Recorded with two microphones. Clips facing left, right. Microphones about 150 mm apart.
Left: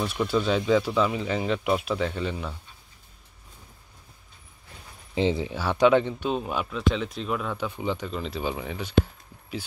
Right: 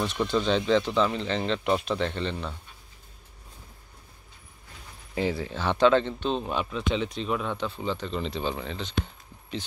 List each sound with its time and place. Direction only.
0.0 s speech: 10° left (ahead or behind)
5.1 s speech: 20° left (ahead or behind)
8.1 s speech: 5° left (ahead or behind)
9.0 s a sound: 5° left (ahead or behind)